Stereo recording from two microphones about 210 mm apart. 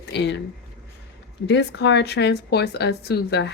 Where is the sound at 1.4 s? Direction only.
55° left (ahead or behind).